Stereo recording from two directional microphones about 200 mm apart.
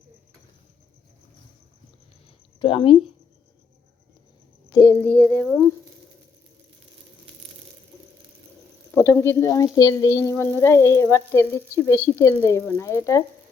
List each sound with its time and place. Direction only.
2.6 s speech: 25° left (ahead or behind)
4.7 s a sound: 15° left (ahead or behind)
5.3 s speech: centre (ahead or behind)
8.9 s speech: 10° left (ahead or behind)
9.7 s frying: 15° left (ahead or behind)